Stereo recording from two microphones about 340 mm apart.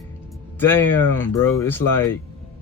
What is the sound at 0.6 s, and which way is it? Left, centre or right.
Speech, centre.